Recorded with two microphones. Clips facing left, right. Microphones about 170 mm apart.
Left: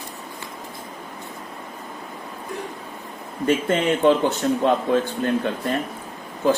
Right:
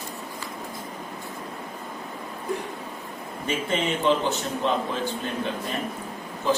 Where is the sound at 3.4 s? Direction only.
50° left (ahead or behind).